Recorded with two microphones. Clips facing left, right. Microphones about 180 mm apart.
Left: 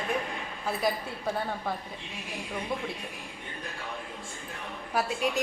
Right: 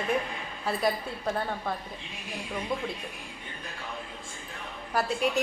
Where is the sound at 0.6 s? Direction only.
Centre (ahead or behind).